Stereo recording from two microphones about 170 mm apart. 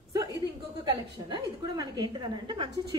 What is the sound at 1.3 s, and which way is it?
A woman's voice, 25° right (ahead or behind).